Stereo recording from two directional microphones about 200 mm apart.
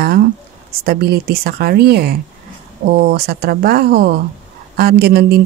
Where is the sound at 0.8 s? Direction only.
50° right (ahead or behind).